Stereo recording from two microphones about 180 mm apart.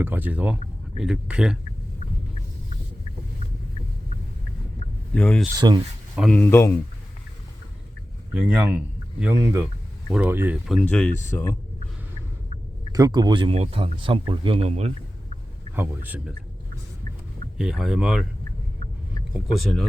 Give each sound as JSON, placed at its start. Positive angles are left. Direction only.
{"t": 0.0, "sound": "speech", "side_deg": -10}
{"t": 5.1, "sound": "speech", "side_deg": 5}
{"t": 5.5, "sound": "speech", "side_deg": -25}
{"t": 6.1, "sound": "speech", "side_deg": 5}
{"t": 8.3, "sound": "speech", "side_deg": -5}
{"t": 10.7, "sound": "speech", "side_deg": 5}
{"t": 12.9, "sound": "speech", "side_deg": -20}
{"t": 15.7, "sound": "speech", "side_deg": -10}
{"t": 17.6, "sound": "speech", "side_deg": 0}
{"t": 19.3, "sound": "speech", "side_deg": 0}